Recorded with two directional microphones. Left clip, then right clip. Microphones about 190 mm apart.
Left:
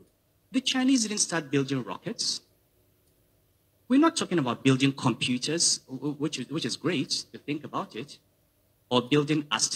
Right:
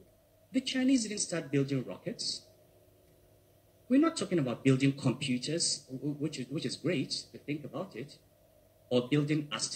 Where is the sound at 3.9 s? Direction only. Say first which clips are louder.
Left 5 dB; 55° left (ahead or behind).